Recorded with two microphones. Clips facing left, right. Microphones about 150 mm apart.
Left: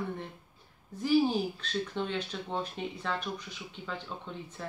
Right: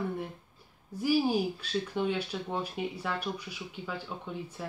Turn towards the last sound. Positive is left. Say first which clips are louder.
# right 2 dB
turn(degrees=-10)  # may be behind; listen again after turning